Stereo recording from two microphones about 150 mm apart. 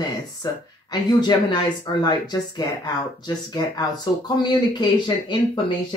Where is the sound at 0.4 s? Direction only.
25° left (ahead or behind).